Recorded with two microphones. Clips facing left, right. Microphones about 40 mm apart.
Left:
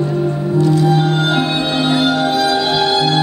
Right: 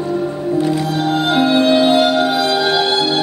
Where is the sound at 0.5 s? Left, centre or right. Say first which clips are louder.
Left 2 dB; right.